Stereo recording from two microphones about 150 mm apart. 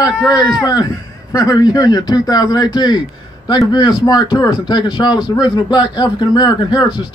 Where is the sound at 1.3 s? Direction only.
25° left (ahead or behind).